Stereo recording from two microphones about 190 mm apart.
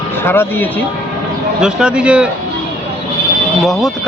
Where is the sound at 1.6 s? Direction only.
5° right (ahead or behind).